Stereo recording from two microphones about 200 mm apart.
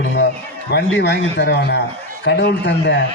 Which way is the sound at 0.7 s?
55° left (ahead or behind).